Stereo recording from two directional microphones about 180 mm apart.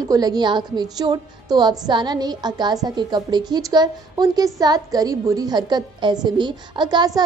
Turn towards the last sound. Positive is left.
turn(degrees=-25)  # may be behind; listen again after turning